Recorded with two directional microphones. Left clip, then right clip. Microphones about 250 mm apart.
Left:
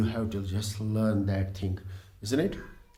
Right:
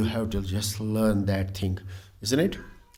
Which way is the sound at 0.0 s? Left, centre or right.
Right.